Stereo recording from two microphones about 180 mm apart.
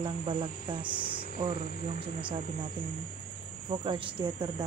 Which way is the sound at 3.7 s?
30° right (ahead or behind).